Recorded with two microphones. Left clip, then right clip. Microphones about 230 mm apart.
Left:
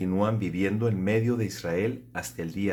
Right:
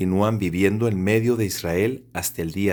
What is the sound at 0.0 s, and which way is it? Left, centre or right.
Speech, right.